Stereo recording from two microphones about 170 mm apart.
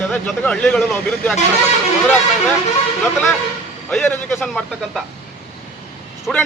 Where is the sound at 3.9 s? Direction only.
10° left (ahead or behind).